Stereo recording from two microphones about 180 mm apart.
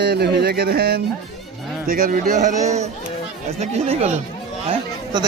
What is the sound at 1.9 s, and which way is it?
Speech, 50° right (ahead or behind).